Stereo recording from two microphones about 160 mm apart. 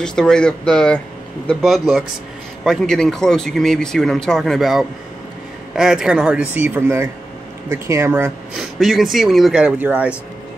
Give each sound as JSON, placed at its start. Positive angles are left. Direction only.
{"t": 0.0, "sound": "speech", "side_deg": 5}
{"t": 8.5, "sound": "speech", "side_deg": 0}